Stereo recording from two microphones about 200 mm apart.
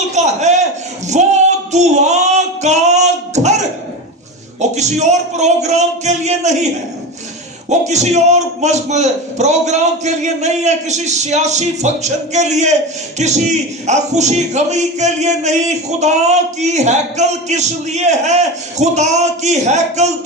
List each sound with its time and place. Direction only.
0.1 s a sound: 35° right (ahead or behind)
1.0 s music: 35° right (ahead or behind)
4.6 s a man's voice: 35° right (ahead or behind)
7.7 s a man's voice: 35° right (ahead or behind)